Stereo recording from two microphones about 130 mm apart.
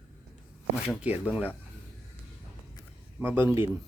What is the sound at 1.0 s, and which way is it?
Speech, 10° right (ahead or behind).